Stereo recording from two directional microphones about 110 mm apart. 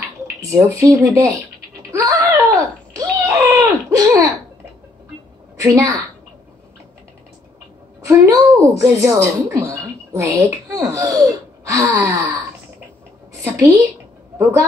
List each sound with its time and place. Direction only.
0.5 s speech: 30° right (ahead or behind)
1.9 s babbling: 30° right (ahead or behind)
5.6 s speech: 30° right (ahead or behind)
8.3 s speech: 30° right (ahead or behind)
11.6 s gasp: 30° right (ahead or behind)
13.4 s a woman's voice: 30° right (ahead or behind)